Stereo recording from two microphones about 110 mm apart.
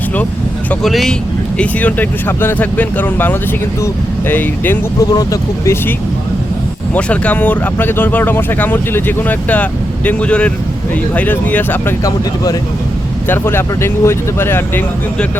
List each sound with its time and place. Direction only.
0.8 s speech: centre (ahead or behind)
1.5 s speech: 15° left (ahead or behind)
4.9 s speech: 30° left (ahead or behind)
6.9 s speech: 15° left (ahead or behind)
13.2 s speech: 20° left (ahead or behind)